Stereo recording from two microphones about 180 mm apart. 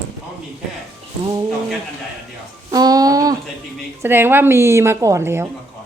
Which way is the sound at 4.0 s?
10° right (ahead or behind).